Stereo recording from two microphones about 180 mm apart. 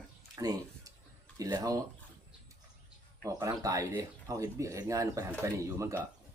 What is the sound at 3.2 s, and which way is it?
Speech, 20° right (ahead or behind).